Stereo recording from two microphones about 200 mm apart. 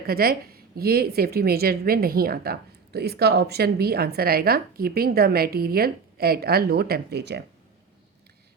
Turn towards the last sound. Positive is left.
turn(degrees=-55)  # may be behind; listen again after turning